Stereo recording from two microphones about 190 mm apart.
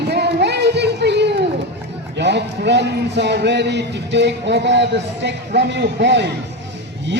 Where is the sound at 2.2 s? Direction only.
65° right (ahead or behind).